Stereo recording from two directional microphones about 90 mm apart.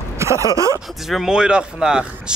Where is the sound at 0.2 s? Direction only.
35° right (ahead or behind).